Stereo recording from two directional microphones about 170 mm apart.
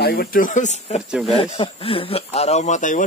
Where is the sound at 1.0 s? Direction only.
5° right (ahead or behind).